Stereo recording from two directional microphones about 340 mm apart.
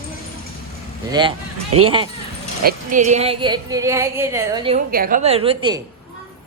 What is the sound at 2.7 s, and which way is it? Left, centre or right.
Speech, right.